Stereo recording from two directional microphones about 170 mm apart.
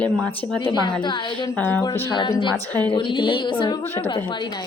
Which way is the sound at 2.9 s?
30° left (ahead or behind).